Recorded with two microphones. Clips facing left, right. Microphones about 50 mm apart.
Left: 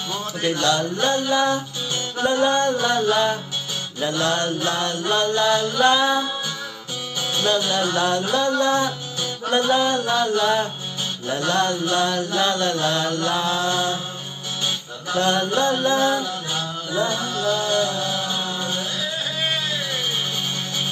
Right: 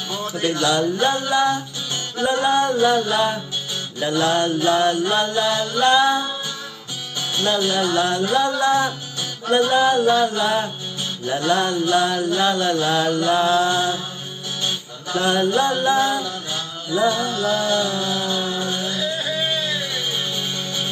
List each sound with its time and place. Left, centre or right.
0.4 s mantra: centre
7.3 s music: centre
7.9 s mantra: centre
15.1 s mantra: centre
17.2 s music: right